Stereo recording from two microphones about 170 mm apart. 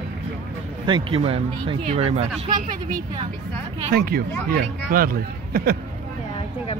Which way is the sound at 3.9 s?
65° right (ahead or behind).